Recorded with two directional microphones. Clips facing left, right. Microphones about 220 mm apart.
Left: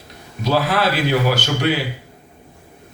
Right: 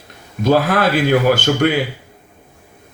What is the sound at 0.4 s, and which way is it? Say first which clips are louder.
A man's voice: right 4 dB; 50° right (ahead or behind).